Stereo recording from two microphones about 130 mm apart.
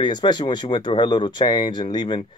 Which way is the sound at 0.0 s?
35° left (ahead or behind).